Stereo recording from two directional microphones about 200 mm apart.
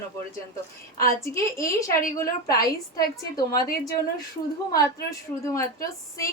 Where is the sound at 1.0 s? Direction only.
15° left (ahead or behind).